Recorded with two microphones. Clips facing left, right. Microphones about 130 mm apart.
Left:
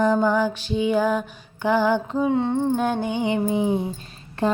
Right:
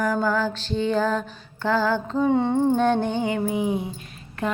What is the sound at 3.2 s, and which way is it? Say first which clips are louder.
Music: left 2 dB; 25° left (ahead or behind).